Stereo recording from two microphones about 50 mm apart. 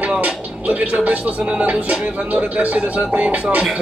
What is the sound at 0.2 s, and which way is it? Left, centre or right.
Music, right.